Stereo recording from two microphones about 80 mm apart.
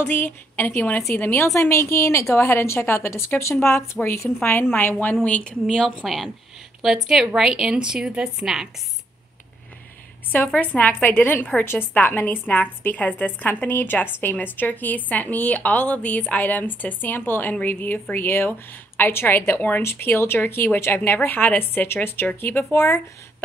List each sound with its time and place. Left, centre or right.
0.0 s a woman's voice: left; by 8.6 s centre
10.3 s a woman's voice: left